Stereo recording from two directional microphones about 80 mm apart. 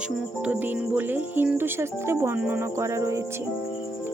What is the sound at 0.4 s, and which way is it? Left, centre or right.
Speech, right.